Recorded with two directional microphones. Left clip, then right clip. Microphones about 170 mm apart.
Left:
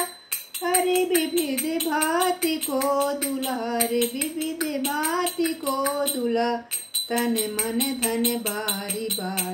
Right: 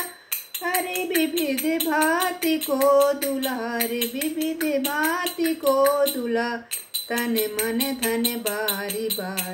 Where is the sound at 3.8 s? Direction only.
10° left (ahead or behind).